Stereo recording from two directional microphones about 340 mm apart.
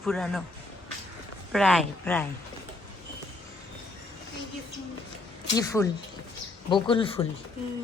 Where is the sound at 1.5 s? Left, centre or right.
Centre.